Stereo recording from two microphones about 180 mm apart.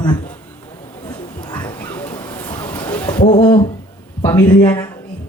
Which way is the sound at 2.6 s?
10° left (ahead or behind).